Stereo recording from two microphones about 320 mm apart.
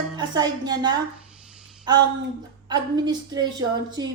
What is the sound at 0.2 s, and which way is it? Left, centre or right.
A man's voice, centre.